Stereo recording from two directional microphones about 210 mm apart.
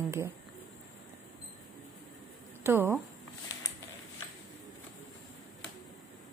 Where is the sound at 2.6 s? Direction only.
10° right (ahead or behind).